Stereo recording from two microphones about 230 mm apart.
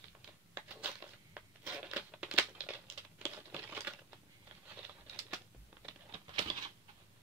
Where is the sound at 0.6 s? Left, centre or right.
Centre.